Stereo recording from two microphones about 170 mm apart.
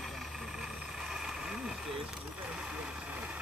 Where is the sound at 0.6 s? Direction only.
5° right (ahead or behind).